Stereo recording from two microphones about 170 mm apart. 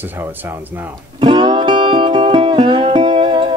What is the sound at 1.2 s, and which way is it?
Music, 30° right (ahead or behind).